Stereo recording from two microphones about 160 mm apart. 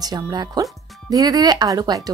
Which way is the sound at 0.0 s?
25° right (ahead or behind).